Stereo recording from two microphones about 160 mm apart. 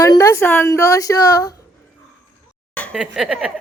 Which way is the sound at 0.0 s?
20° left (ahead or behind).